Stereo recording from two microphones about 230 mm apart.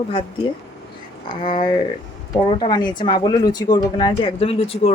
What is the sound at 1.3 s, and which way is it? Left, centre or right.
Speech, left.